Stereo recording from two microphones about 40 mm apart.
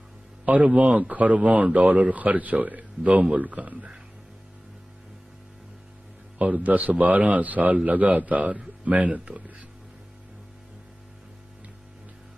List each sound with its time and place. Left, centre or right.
0.4 s a man's voice: right
6.4 s a man's voice: right